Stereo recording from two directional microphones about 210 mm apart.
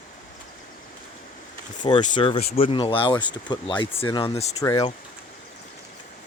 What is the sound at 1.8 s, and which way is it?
Speech, 20° left (ahead or behind).